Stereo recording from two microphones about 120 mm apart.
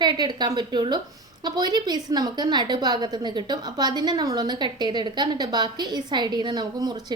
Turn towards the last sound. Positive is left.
turn(degrees=-35)  # may be behind; listen again after turning